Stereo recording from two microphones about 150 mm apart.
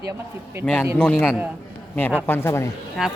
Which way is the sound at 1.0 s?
10° left (ahead or behind).